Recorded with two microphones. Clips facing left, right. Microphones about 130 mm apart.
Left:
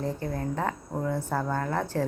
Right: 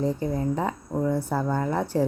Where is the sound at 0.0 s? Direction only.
15° right (ahead or behind).